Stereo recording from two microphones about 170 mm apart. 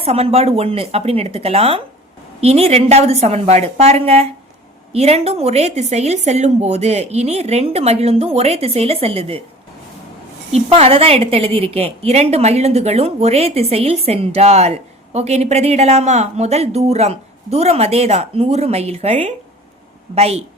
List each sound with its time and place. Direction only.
0.0 s a woman's voice: 35° right (ahead or behind)
10.5 s a woman's voice: 35° right (ahead or behind)